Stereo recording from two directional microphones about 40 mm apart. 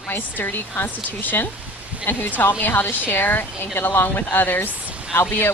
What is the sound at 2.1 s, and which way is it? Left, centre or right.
Speech, left.